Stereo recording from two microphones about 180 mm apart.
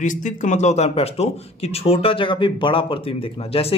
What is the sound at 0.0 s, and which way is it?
Speech, 45° left (ahead or behind).